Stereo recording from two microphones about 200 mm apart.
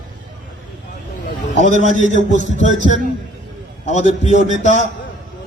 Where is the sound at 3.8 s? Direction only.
35° left (ahead or behind).